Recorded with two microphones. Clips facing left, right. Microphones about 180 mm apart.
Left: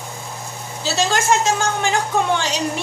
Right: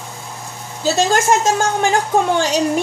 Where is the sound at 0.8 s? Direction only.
45° right (ahead or behind).